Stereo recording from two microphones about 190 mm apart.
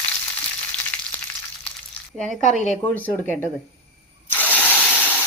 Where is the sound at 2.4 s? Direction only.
40° left (ahead or behind).